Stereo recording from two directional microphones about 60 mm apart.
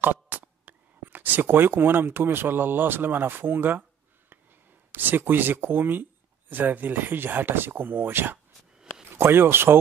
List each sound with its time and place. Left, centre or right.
0.0 s speech: right
4.9 s speech: right